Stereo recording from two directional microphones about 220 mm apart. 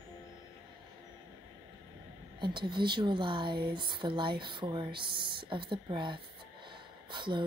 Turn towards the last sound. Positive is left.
turn(degrees=-20)  # may be behind; listen again after turning